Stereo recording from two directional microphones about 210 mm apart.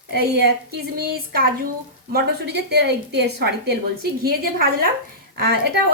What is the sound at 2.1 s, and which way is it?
Speech, 50° right (ahead or behind).